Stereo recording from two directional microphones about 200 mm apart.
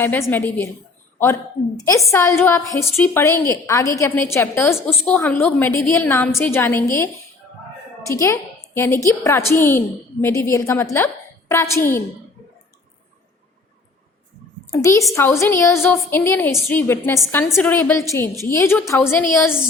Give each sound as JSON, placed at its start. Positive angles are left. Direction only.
{"t": 0.0, "sound": "a woman's voice", "side_deg": 10}
{"t": 14.7, "sound": "a woman's voice", "side_deg": 15}